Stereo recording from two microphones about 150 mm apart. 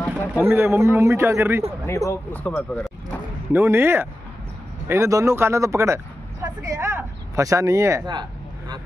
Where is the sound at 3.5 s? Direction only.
15° right (ahead or behind).